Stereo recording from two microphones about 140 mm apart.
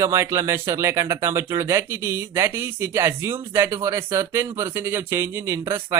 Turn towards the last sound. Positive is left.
turn(degrees=-20)  # may be behind; listen again after turning